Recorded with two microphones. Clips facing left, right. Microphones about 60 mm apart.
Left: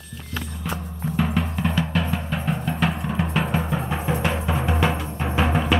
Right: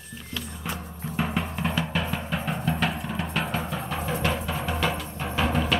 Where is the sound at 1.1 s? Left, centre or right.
Centre.